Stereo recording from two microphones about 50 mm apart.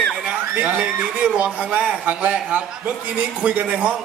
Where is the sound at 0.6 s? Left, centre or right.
Right.